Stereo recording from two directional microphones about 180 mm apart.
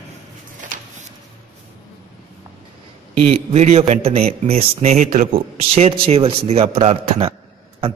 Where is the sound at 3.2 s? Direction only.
35° right (ahead or behind).